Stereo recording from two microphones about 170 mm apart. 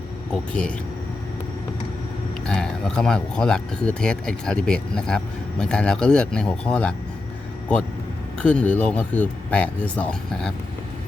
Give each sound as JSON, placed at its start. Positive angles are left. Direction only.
{"t": 0.3, "sound": "speech", "side_deg": 5}
{"t": 2.5, "sound": "speech", "side_deg": 5}
{"t": 8.4, "sound": "speech", "side_deg": 5}